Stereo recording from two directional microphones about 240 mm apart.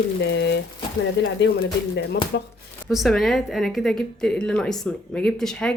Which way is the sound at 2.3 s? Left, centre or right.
Left.